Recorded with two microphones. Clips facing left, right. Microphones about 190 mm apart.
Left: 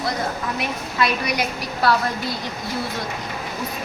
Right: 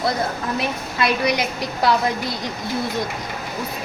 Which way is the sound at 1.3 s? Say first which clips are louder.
Right 2 dB; 20° right (ahead or behind).